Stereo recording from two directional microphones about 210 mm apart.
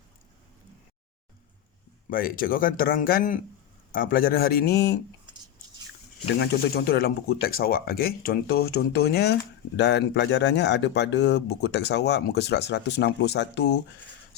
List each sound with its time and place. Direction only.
2.0 s speech: 40° left (ahead or behind)
6.4 s speech: 50° left (ahead or behind)